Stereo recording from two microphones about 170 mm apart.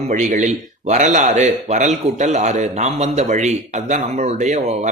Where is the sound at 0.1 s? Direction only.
45° right (ahead or behind).